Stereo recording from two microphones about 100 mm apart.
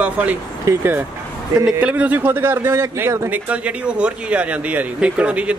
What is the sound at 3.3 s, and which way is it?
Speech, 15° right (ahead or behind).